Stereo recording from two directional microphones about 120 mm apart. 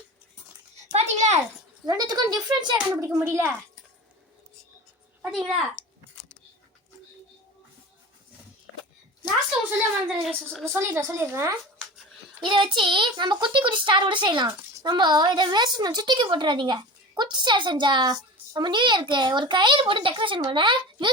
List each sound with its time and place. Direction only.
0.9 s a sound: 70° right (ahead or behind)
1.9 s a woman's voice: 35° right (ahead or behind)
2.9 s a woman's voice: 20° right (ahead or behind)
5.3 s a child's voice: 5° right (ahead or behind)
10.2 s a child's voice: 5° left (ahead or behind)
10.8 s a woman's voice: 20° right (ahead or behind)
12.4 s a woman's voice: 45° right (ahead or behind)